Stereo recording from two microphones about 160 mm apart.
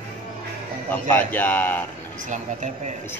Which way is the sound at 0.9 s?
10° left (ahead or behind).